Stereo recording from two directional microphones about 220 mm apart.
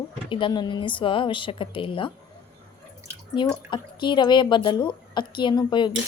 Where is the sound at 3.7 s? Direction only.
20° left (ahead or behind).